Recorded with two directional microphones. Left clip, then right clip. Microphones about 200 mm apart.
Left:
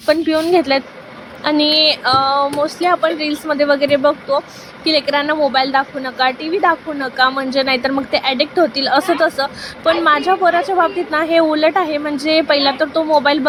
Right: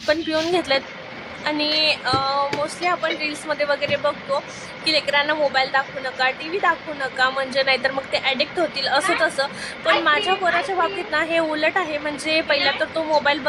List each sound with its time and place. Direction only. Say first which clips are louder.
0.1 s speech: left 7 dB; 15° left (ahead or behind)